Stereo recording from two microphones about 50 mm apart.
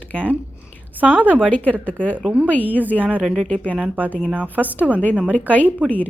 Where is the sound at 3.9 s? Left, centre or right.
Right.